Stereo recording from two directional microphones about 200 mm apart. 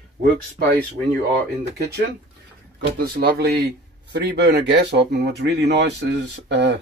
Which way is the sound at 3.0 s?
50° right (ahead or behind).